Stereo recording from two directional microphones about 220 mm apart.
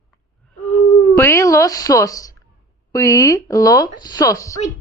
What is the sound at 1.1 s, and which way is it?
Speech, 10° left (ahead or behind).